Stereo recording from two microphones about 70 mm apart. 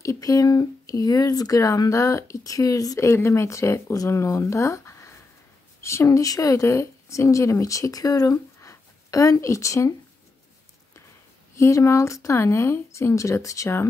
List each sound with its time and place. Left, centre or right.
0.0 s speech: left
3.1 s a woman's voice: left
8.5 s a sound: left
11.5 s a woman's voice: left